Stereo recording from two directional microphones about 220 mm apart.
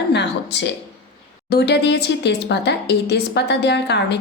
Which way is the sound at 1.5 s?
50° left (ahead or behind).